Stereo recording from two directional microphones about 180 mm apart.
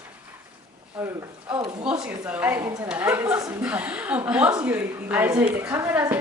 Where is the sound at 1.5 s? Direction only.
25° right (ahead or behind).